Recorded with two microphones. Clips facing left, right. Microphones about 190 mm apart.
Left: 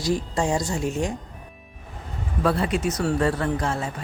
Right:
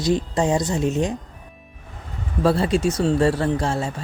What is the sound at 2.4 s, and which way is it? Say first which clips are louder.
Speech: right 4 dB; 30° right (ahead or behind).